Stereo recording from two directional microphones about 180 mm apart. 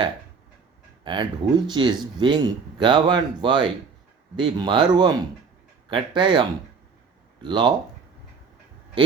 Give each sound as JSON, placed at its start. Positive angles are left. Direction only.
{"t": 1.0, "sound": "speech", "side_deg": -25}
{"t": 7.4, "sound": "speech", "side_deg": -25}